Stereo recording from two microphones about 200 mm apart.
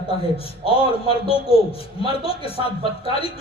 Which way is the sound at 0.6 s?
30° left (ahead or behind).